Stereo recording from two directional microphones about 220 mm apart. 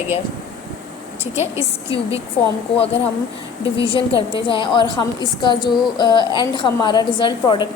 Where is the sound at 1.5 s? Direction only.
25° left (ahead or behind).